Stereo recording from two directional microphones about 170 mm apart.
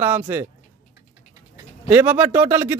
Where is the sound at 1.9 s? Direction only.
10° right (ahead or behind).